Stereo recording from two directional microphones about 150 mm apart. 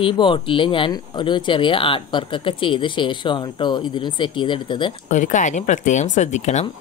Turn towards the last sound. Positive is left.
turn(degrees=50)  # may be behind; listen again after turning